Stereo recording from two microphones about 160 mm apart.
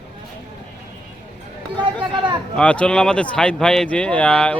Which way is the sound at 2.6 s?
5° left (ahead or behind).